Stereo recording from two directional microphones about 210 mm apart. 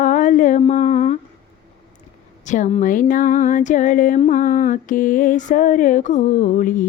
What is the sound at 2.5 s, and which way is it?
Speech, 30° left (ahead or behind).